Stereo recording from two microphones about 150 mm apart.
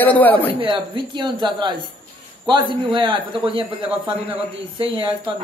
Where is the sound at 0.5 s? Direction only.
35° right (ahead or behind).